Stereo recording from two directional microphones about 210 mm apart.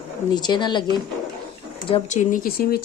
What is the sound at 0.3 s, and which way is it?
Speech, 20° left (ahead or behind).